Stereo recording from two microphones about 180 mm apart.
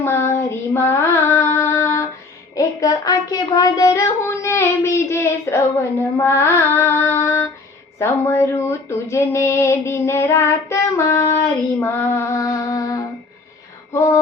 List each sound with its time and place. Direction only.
0.0 s female singing: 15° left (ahead or behind)
2.6 s child singing: 20° left (ahead or behind)
6.1 s mantra: 15° left (ahead or behind)
7.9 s a sound: 15° left (ahead or behind)
11.8 s female singing: 15° left (ahead or behind)
13.9 s mantra: 15° left (ahead or behind)